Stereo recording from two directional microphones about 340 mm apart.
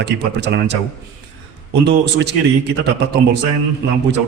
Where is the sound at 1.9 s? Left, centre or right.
Right.